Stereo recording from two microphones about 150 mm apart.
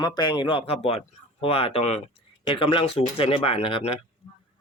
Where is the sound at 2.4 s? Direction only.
35° left (ahead or behind).